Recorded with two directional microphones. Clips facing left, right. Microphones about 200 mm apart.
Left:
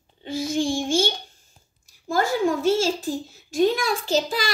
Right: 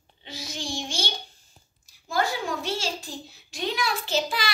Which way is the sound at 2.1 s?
50° left (ahead or behind).